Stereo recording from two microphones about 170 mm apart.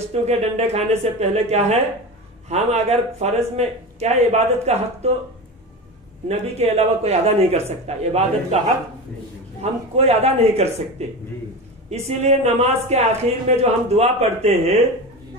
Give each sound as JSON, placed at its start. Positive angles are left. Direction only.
{"t": 0.1, "sound": "speech", "side_deg": -40}
{"t": 6.2, "sound": "speech", "side_deg": -40}
{"t": 9.6, "sound": "speech", "side_deg": -40}
{"t": 12.2, "sound": "speech", "side_deg": -40}